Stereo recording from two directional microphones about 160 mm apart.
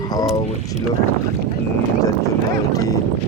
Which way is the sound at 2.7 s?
20° left (ahead or behind).